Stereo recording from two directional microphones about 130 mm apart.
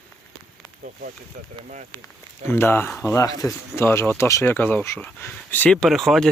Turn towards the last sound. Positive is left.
turn(degrees=0)  # may be behind; listen again after turning